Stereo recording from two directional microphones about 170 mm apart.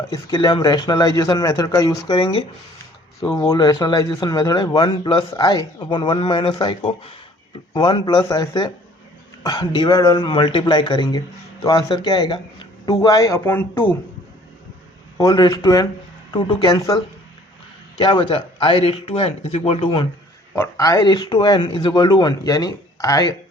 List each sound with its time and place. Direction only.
0.1 s speech: 25° left (ahead or behind)
15.2 s speech: 25° left (ahead or behind)
18.0 s speech: 30° left (ahead or behind)
20.6 s speech: 20° left (ahead or behind)